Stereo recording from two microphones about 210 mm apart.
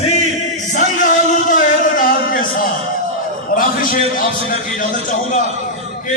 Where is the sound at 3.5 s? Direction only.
40° left (ahead or behind).